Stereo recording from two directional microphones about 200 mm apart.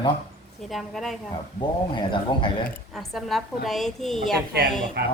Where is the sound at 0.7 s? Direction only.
Centre (ahead or behind).